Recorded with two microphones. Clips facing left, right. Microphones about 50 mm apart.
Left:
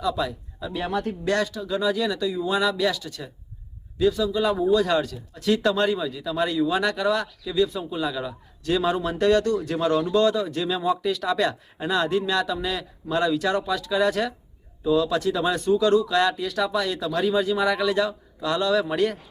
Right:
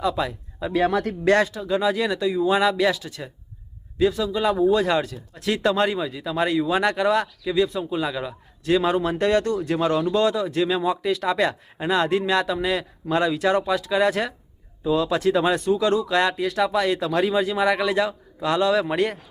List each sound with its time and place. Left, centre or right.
0.0 s speech: right
0.7 s speech: right
1.5 s speech: right
5.6 s speech: centre
5.9 s speech: right
7.7 s a man's voice: centre
7.9 s speech: right
15.8 s speech: centre